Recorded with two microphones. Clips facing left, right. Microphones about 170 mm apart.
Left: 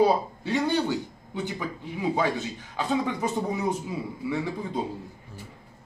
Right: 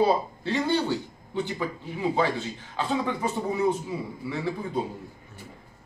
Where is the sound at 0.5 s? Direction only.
15° left (ahead or behind).